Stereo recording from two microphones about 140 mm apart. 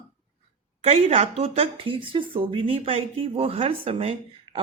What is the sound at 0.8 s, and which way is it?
Speech, 45° right (ahead or behind).